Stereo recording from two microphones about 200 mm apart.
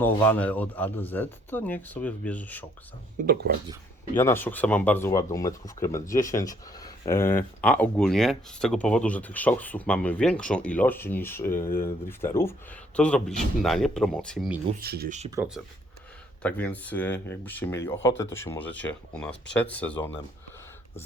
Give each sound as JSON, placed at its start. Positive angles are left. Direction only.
{"t": 0.0, "sound": "speech", "side_deg": 10}
{"t": 3.2, "sound": "speech", "side_deg": -40}
{"t": 4.1, "sound": "speech", "side_deg": 10}
{"t": 14.8, "sound": "speech", "side_deg": -50}
{"t": 15.4, "sound": "speech", "side_deg": -5}